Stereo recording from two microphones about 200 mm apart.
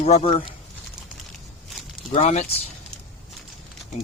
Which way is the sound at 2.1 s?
30° left (ahead or behind).